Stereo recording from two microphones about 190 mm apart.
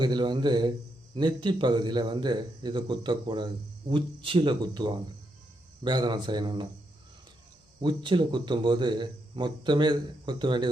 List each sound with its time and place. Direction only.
0.0 s a man's voice: 25° right (ahead or behind)
7.8 s a man's voice: 25° right (ahead or behind)